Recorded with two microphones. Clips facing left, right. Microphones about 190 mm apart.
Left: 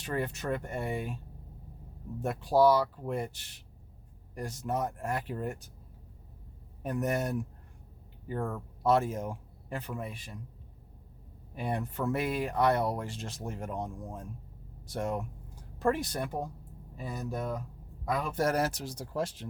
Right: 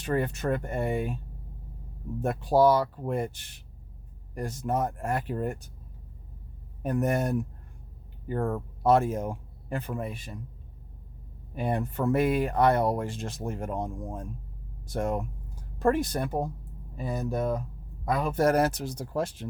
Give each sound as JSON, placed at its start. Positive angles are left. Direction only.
{"t": 0.0, "sound": "speech", "side_deg": -50}
{"t": 2.2, "sound": "speech", "side_deg": -50}
{"t": 4.4, "sound": "speech", "side_deg": -50}
{"t": 6.8, "sound": "speech", "side_deg": -50}
{"t": 11.5, "sound": "speech", "side_deg": -50}